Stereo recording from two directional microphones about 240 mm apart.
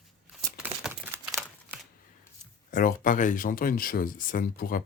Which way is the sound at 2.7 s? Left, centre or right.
Left.